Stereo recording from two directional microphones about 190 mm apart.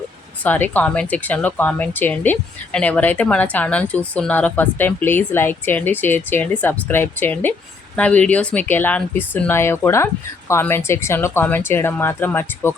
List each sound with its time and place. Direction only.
0.4 s speech: 10° left (ahead or behind)